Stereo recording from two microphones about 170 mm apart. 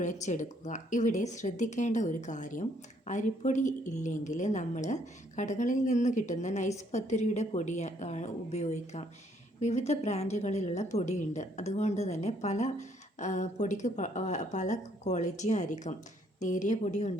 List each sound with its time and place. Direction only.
0.0 s a woman's voice: 45° left (ahead or behind)